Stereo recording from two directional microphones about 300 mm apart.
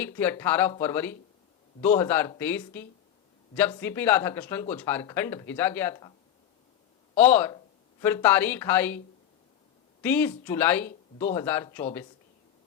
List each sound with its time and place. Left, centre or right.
0.0 s speech: centre
7.2 s speech: centre
10.0 s speech: centre